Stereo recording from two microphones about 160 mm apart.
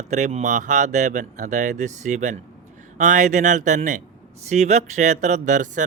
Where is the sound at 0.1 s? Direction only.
45° right (ahead or behind).